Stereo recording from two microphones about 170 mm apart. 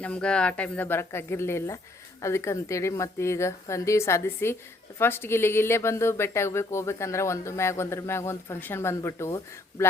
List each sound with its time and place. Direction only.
0.0 s speech: 5° left (ahead or behind)